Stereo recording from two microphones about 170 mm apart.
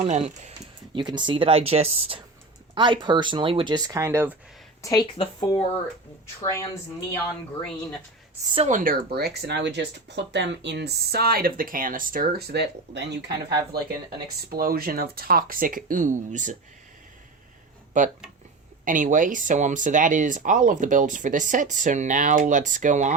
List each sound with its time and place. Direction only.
0.1 s speech: 40° right (ahead or behind)
0.9 s speech: 25° right (ahead or behind)
4.8 s a woman's voice: 20° left (ahead or behind)
6.4 s speech: 15° left (ahead or behind)
8.5 s speech: 45° right (ahead or behind); by 13.6 s 85° right
14.5 s speech: 60° right (ahead or behind)
18.0 s speech: 50° right (ahead or behind)